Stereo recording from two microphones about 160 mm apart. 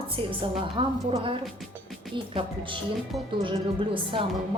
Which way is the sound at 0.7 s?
35° right (ahead or behind).